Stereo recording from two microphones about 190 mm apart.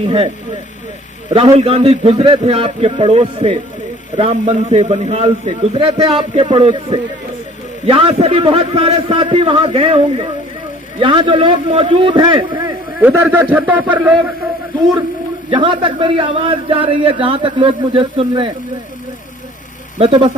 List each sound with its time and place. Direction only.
0.1 s a man's voice: 25° right (ahead or behind)
13.0 s a man's voice: 10° right (ahead or behind)
15.4 s a man's voice: 25° right (ahead or behind)
20.0 s a man's voice: 30° right (ahead or behind)